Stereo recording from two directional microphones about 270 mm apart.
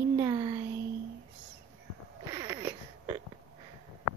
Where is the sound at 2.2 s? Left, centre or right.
Centre.